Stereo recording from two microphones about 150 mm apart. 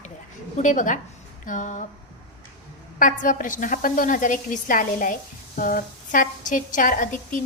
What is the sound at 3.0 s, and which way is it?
A woman's voice, 60° left (ahead or behind).